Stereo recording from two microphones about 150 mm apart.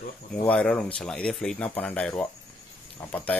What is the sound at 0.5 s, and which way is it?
Speech, 5° left (ahead or behind).